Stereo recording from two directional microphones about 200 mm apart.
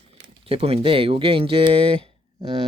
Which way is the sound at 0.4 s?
30° right (ahead or behind).